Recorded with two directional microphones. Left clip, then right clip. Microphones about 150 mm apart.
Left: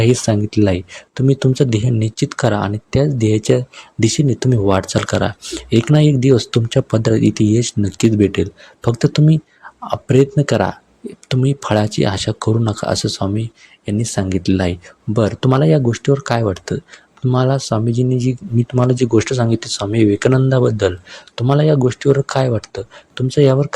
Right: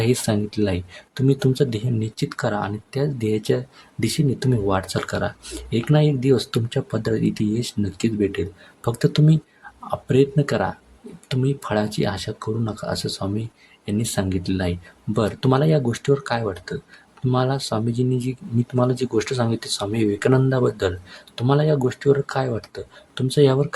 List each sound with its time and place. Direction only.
0.0 s speech: 25° left (ahead or behind)